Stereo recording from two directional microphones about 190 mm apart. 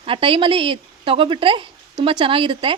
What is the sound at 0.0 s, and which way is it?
Speech, 30° right (ahead or behind).